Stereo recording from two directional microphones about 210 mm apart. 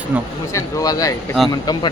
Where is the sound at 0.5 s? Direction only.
15° left (ahead or behind).